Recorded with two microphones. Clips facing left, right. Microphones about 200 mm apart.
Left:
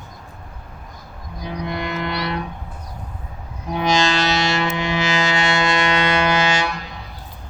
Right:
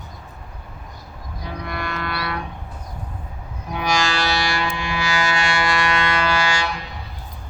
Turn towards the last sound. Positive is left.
turn(degrees=20)  # may be behind; listen again after turning